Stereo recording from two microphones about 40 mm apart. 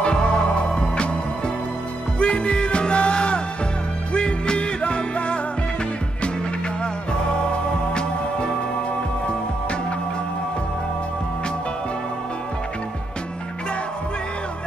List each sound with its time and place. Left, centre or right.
0.0 s music: left
2.1 s music: left
7.9 s music: left